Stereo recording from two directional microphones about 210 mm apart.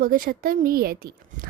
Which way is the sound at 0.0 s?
45° right (ahead or behind).